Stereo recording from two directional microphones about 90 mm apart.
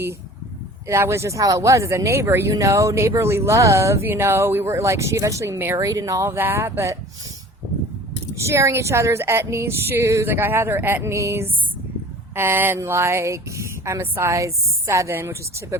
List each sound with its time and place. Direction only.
0.9 s speech: 30° right (ahead or behind)
5.8 s speech: 40° right (ahead or behind)
8.4 s speech: 35° right (ahead or behind)